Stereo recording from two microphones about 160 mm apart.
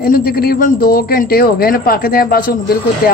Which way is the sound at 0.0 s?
70° left (ahead or behind).